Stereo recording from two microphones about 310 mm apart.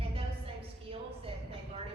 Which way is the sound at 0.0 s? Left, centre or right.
Centre.